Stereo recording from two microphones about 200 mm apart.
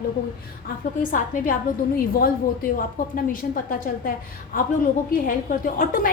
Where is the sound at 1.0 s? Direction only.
45° left (ahead or behind).